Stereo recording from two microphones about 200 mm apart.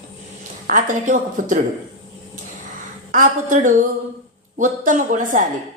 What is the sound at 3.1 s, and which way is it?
A woman's voice, 40° right (ahead or behind).